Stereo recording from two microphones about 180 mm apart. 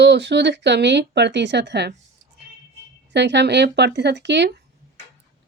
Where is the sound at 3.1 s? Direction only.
75° right (ahead or behind).